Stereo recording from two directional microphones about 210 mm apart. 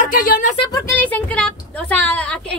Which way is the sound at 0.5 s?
20° left (ahead or behind).